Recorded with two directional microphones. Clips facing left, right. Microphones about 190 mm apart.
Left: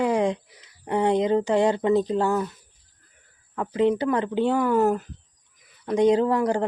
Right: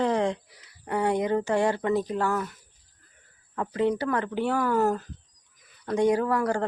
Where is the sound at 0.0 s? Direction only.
15° left (ahead or behind).